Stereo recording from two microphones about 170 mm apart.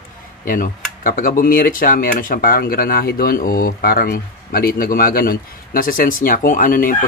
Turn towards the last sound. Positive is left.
turn(degrees=55)  # may be behind; listen again after turning